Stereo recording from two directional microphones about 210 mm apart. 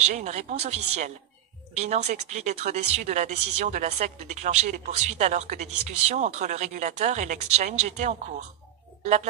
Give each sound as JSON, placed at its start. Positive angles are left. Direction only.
{"t": 0.0, "sound": "speech", "side_deg": -30}